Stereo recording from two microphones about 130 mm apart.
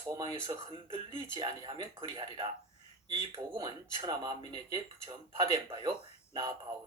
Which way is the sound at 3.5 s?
35° right (ahead or behind).